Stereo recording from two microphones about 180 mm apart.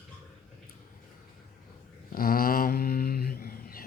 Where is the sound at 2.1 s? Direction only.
55° left (ahead or behind).